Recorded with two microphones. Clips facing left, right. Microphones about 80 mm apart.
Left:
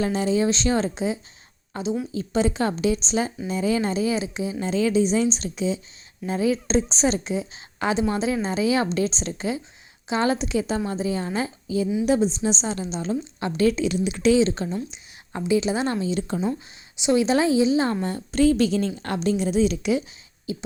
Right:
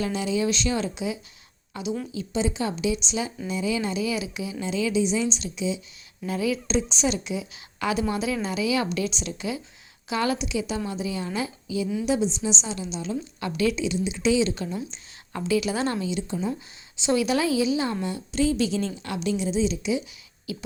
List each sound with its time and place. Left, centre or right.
0.0 s a woman's voice: left
2.1 s a woman's voice: left
6.2 s a woman's voice: left
14.3 s a woman's voice: left
16.3 s speech: left
17.2 s a woman's voice: left
20.5 s speech: left